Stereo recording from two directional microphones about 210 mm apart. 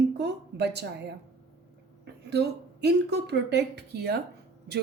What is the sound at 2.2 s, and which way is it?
A woman's voice, 50° right (ahead or behind).